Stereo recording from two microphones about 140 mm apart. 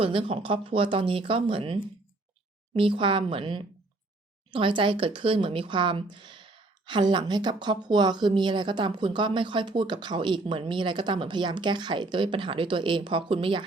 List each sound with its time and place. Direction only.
0.0 s speech: 40° right (ahead or behind)